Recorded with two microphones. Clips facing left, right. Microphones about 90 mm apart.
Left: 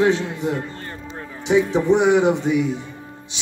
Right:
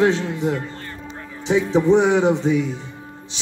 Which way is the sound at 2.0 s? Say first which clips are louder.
Even; 30° right (ahead or behind).